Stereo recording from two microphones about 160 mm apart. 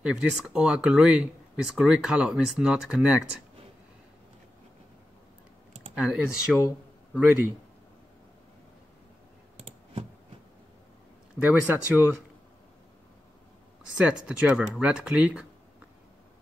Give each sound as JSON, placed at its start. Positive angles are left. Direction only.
{"t": 0.0, "sound": "speech", "side_deg": -5}
{"t": 5.9, "sound": "speech", "side_deg": -5}
{"t": 11.3, "sound": "speech", "side_deg": -10}
{"t": 13.9, "sound": "speech", "side_deg": -5}